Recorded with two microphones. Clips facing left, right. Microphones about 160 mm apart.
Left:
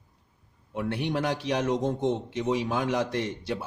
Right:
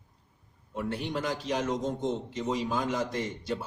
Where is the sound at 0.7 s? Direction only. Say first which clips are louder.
Left 3 dB; 65° left (ahead or behind).